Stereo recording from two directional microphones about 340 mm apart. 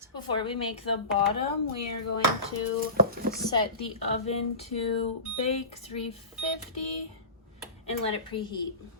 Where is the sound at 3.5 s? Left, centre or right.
Centre.